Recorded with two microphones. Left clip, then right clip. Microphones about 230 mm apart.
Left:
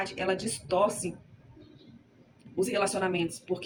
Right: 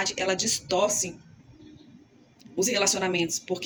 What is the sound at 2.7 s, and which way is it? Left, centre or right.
Speech, centre.